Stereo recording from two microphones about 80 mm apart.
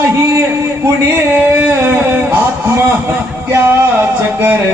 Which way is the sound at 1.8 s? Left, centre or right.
Right.